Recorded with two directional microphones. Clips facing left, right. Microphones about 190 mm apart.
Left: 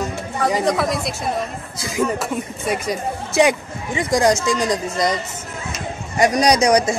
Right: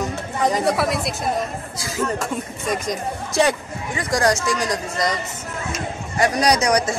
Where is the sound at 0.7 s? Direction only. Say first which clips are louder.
Left 1 dB; 5° right (ahead or behind).